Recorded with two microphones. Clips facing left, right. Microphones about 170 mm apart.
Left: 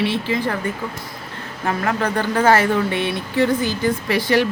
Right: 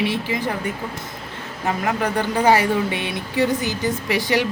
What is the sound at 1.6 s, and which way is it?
Speech, 15° right (ahead or behind).